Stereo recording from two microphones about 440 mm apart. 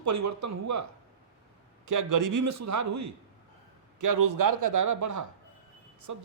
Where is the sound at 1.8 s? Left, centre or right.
Right.